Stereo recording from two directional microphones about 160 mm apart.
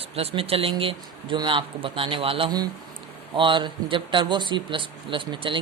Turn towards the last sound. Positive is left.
turn(degrees=-30)  # may be behind; listen again after turning